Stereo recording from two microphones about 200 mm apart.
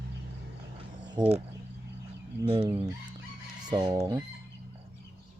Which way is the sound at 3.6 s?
20° right (ahead or behind).